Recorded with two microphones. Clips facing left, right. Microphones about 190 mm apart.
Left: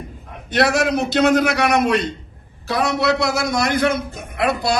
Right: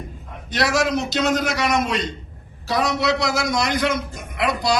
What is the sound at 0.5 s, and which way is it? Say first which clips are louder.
A man's voice: left 3 dB; 55° left (ahead or behind).